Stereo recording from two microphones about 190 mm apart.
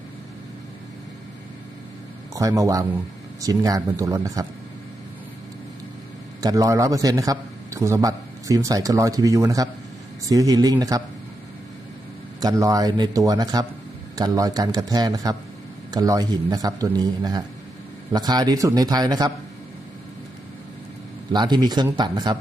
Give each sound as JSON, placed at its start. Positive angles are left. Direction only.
{"t": 2.3, "sound": "a man's voice", "side_deg": -15}
{"t": 6.4, "sound": "a man's voice", "side_deg": -20}
{"t": 12.4, "sound": "a man's voice", "side_deg": -20}
{"t": 21.3, "sound": "a man's voice", "side_deg": -20}